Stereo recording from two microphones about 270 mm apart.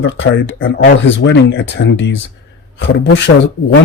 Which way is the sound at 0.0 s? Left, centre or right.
Left.